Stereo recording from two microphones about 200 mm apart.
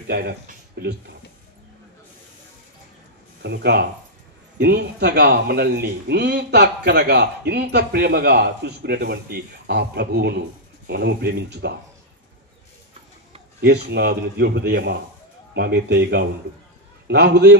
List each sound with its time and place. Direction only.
0.1 s speech: 55° right (ahead or behind)
3.4 s speech: 55° right (ahead or behind)
13.6 s a man's voice: 55° right (ahead or behind)